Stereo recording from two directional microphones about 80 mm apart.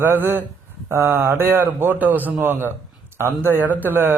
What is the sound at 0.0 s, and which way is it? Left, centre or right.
A man's voice, right.